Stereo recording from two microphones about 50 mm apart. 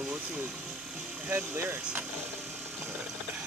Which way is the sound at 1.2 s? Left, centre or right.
Right.